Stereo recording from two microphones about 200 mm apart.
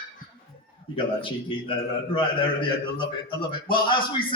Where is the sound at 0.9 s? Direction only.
25° left (ahead or behind).